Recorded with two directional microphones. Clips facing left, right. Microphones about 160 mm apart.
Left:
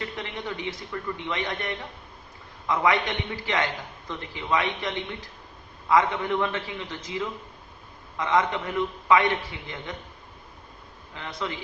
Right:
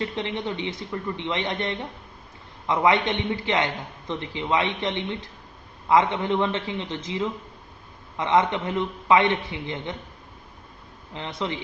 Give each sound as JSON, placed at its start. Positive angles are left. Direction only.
{"t": 0.0, "sound": "a man's voice", "side_deg": -25}
{"t": 11.1, "sound": "a man's voice", "side_deg": -20}